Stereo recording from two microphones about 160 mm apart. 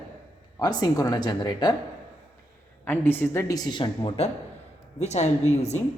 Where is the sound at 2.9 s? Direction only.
10° left (ahead or behind).